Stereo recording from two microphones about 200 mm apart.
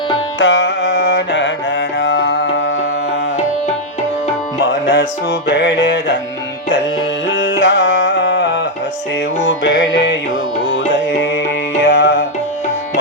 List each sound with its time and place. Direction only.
0.3 s music: 70° left (ahead or behind)
4.6 s music: 60° left (ahead or behind)
7.3 s music: 60° left (ahead or behind)
11.8 s music: 60° left (ahead or behind)